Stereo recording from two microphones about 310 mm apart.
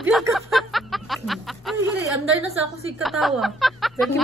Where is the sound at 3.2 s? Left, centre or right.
Centre.